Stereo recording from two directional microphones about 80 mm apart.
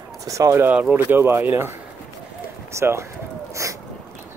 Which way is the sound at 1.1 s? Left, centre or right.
Right.